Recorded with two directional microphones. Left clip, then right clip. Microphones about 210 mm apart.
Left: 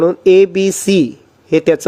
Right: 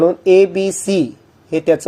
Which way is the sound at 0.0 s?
35° left (ahead or behind).